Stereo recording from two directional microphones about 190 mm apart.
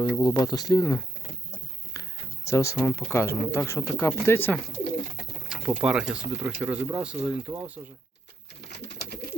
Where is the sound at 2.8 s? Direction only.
15° left (ahead or behind).